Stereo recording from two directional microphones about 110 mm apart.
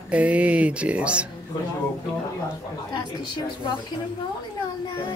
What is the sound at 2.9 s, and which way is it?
Speech, 45° left (ahead or behind).